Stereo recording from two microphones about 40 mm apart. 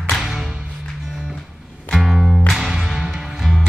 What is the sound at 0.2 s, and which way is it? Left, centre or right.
Music, centre.